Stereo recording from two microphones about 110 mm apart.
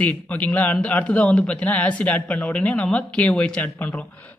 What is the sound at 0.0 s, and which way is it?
A man's voice, 15° left (ahead or behind).